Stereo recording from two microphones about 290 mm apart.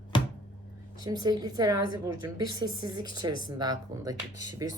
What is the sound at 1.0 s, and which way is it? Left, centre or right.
Speech, centre.